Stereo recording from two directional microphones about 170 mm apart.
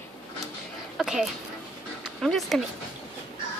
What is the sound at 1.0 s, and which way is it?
A woman's voice, 5° right (ahead or behind).